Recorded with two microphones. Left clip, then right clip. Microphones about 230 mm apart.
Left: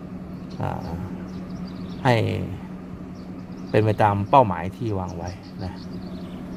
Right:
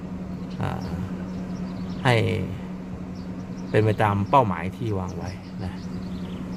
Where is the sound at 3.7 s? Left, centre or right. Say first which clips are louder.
Left 2 dB; centre.